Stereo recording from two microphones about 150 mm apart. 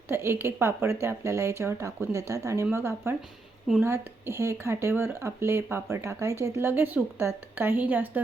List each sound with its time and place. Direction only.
0.1 s speech: 15° right (ahead or behind)